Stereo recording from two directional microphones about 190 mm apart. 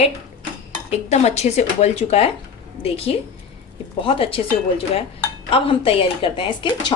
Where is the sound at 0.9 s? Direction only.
35° left (ahead or behind).